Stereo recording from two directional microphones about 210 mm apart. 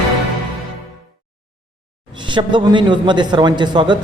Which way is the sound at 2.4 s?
20° right (ahead or behind).